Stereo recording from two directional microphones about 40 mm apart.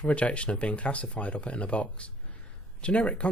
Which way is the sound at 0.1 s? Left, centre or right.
Left.